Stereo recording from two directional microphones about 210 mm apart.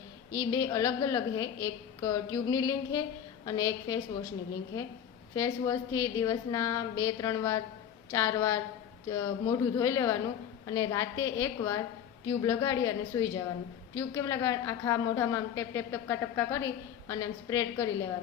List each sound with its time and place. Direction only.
0.3 s a woman's voice: 15° left (ahead or behind)
5.3 s a woman's voice: 15° left (ahead or behind)